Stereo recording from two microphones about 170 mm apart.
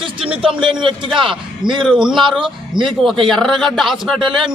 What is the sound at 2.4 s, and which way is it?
Speech, 30° right (ahead or behind).